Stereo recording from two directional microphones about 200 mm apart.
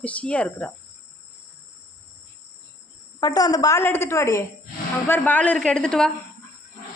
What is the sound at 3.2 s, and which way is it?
A woman's voice, 20° left (ahead or behind).